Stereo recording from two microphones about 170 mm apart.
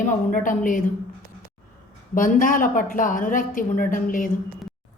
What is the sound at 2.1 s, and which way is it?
A woman's voice, 50° left (ahead or behind).